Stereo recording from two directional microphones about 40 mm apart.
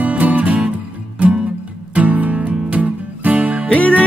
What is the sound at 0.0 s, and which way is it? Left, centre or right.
Music, right.